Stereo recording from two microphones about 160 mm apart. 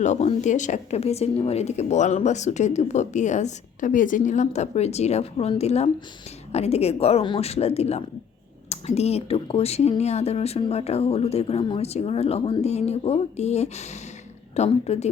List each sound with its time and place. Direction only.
0.0 s speech: 45° left (ahead or behind)